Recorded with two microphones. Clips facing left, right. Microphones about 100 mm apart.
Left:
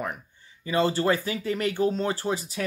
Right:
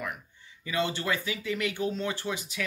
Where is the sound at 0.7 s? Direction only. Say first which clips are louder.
Left 6 dB; 35° left (ahead or behind).